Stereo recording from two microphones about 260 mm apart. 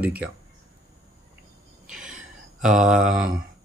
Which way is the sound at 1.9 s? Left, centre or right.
Centre.